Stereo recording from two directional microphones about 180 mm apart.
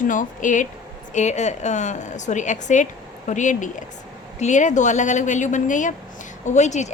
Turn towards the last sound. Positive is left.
turn(degrees=40)  # may be behind; listen again after turning